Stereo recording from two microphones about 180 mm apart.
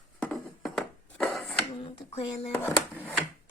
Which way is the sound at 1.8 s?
35° left (ahead or behind).